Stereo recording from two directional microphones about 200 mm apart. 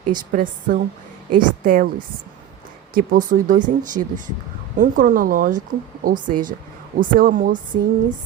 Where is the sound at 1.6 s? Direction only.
45° right (ahead or behind).